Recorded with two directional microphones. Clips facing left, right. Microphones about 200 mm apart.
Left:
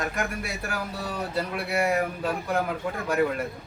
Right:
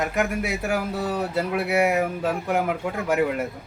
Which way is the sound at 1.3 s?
20° right (ahead or behind).